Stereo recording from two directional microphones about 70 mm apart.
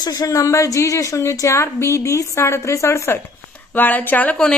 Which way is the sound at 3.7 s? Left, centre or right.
Left.